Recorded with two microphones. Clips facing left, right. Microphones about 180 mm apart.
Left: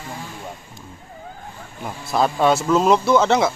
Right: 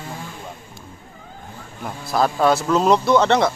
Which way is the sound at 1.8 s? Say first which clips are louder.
Even; centre (ahead or behind).